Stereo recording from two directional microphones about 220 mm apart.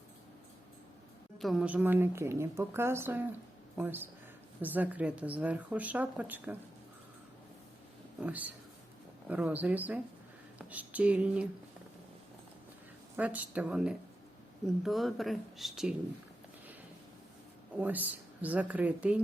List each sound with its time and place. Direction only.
1.4 s speech: centre (ahead or behind)
8.2 s speech: 5° right (ahead or behind)
13.1 s speech: 5° right (ahead or behind)
17.7 s speech: 10° right (ahead or behind)